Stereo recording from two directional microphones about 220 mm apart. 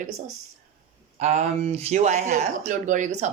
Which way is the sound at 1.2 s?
30° right (ahead or behind).